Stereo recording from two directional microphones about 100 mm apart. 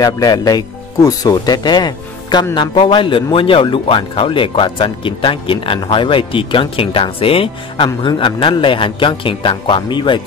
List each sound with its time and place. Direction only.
0.0 s speech: 40° left (ahead or behind)